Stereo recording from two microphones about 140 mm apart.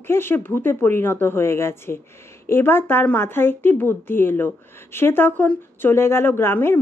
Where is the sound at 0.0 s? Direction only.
15° left (ahead or behind).